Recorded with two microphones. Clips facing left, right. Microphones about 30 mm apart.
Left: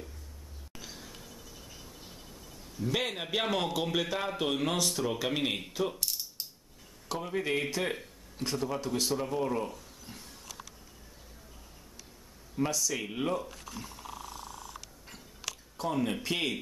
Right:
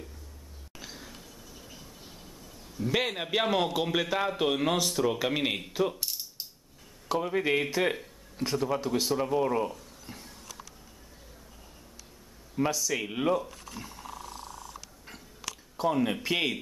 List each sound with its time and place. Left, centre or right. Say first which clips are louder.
0.7 s music: right 2 dB; centre
2.8 s a man's voice: right 3 dB; centre
7.1 s a man's voice: right 5 dB; centre
12.5 s a man's voice: right 3 dB; centre
13.4 s a sound: right 2 dB; centre
15.8 s a man's voice: right 4 dB; centre